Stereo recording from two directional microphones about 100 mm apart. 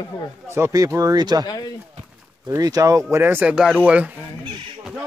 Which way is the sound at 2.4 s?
35° right (ahead or behind).